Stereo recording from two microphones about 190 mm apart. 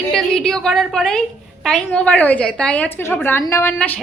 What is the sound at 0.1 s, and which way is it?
A woman's voice, 5° left (ahead or behind).